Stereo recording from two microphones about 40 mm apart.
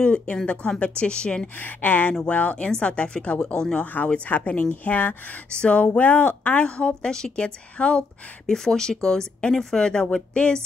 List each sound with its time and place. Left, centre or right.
0.0 s speech: left
1.6 s speech: left
3.8 s speech: left
5.5 s speech: left
7.3 s speech: left
8.5 s speech: centre